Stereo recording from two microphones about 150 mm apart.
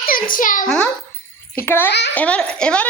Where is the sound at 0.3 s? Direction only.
65° left (ahead or behind).